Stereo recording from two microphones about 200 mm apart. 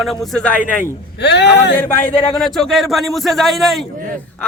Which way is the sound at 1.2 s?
60° left (ahead or behind).